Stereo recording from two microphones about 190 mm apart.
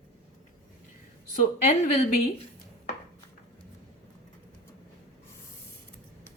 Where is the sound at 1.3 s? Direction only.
40° left (ahead or behind).